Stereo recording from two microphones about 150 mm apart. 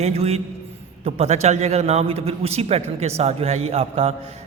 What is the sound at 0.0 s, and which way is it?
A man's voice, 45° right (ahead or behind).